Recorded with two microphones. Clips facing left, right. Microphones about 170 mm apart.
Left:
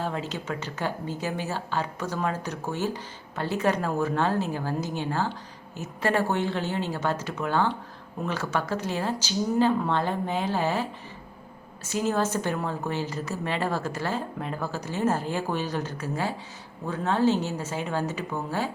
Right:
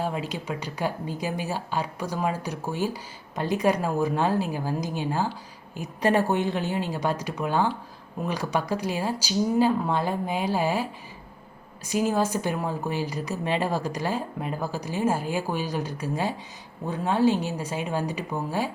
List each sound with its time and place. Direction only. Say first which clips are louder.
0.0 s speech: right 1 dB; 10° right (ahead or behind)